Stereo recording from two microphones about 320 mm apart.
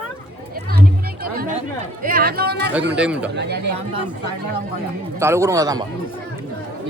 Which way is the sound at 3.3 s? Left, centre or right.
Right.